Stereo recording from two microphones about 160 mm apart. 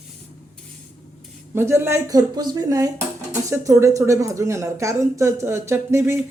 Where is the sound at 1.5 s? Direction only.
15° right (ahead or behind).